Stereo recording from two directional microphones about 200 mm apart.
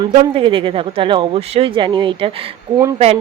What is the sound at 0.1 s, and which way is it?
Speech, 35° right (ahead or behind).